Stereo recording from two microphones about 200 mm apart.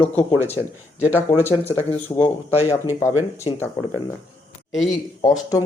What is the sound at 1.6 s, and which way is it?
Speech, 10° left (ahead or behind).